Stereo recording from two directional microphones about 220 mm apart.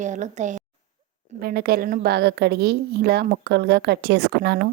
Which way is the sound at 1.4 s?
45° right (ahead or behind).